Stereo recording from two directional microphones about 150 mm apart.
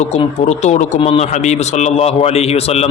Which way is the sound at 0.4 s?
50° left (ahead or behind).